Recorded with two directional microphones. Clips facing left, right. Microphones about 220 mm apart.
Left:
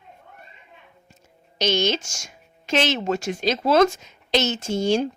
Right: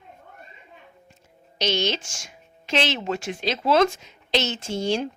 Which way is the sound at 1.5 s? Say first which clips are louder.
Left 3 dB; 45° left (ahead or behind).